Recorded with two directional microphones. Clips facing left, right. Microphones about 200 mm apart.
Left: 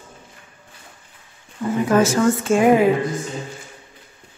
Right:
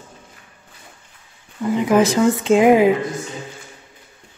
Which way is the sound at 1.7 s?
15° right (ahead or behind).